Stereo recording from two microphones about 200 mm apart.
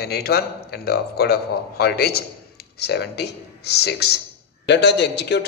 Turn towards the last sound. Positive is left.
turn(degrees=55)  # may be behind; listen again after turning